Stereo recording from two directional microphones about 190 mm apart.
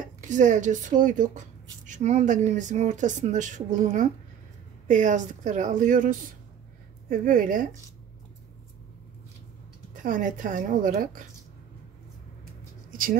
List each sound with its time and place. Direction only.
0.0 s a woman's voice: 40° right (ahead or behind)
10.0 s a woman's voice: 45° right (ahead or behind)